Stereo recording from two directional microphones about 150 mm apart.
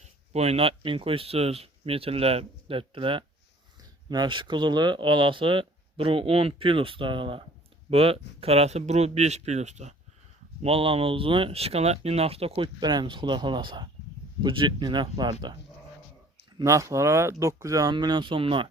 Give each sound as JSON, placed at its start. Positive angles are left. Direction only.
{"t": 0.0, "sound": "speech", "side_deg": -45}
{"t": 16.6, "sound": "speech", "side_deg": -20}